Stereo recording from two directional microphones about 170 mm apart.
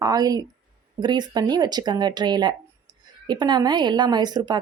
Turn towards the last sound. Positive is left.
turn(degrees=-25)  # may be behind; listen again after turning